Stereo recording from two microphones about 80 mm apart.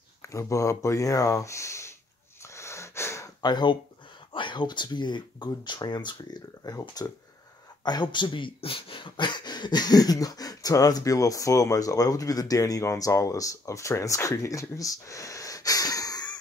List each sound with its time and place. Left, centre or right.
0.2 s speech: left
2.4 s wheeze: left
3.4 s speech: left
4.3 s speech: left
6.6 s speech: left
7.8 s speech: left